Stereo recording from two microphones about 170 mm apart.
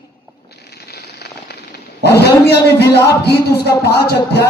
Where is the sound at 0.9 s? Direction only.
65° left (ahead or behind).